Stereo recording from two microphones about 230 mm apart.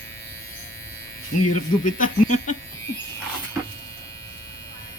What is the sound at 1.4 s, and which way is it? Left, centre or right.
Speech, left.